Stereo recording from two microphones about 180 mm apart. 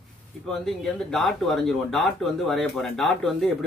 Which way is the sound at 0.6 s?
Centre (ahead or behind).